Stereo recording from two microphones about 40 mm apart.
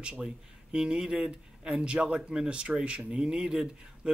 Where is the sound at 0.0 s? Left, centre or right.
Right.